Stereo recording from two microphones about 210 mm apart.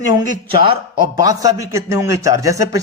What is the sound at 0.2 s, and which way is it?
A man's voice, 25° right (ahead or behind).